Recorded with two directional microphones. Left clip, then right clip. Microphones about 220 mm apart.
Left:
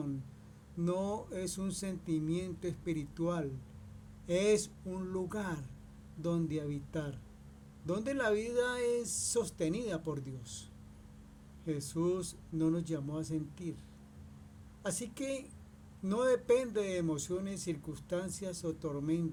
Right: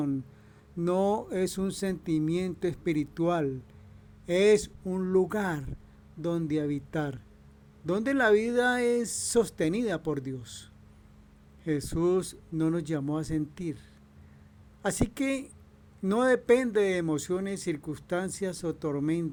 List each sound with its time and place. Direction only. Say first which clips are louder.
0.8 s speech: right 9 dB; 45° right (ahead or behind)
14.8 s speech: right 9 dB; 45° right (ahead or behind)